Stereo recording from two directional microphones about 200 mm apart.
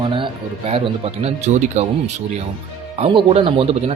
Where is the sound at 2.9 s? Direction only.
30° right (ahead or behind).